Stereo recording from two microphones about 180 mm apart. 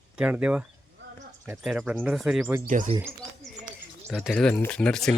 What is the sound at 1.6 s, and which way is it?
Speech, 5° right (ahead or behind).